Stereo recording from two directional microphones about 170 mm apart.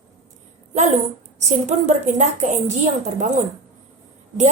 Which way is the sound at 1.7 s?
45° right (ahead or behind).